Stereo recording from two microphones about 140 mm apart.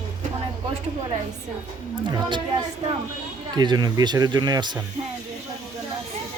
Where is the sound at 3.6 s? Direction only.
30° right (ahead or behind).